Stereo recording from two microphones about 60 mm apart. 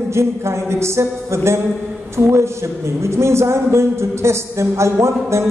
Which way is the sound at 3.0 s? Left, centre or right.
Right.